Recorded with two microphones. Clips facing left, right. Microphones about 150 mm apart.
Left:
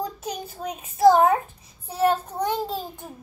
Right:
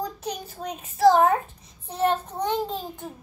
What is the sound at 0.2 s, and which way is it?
A child's voice, 10° left (ahead or behind).